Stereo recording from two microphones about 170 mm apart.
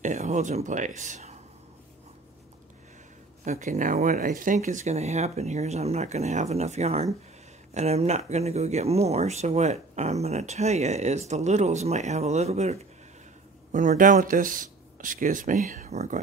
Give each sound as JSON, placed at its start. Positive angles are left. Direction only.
{"t": 0.0, "sound": "speech", "side_deg": -45}
{"t": 3.4, "sound": "speech", "side_deg": -45}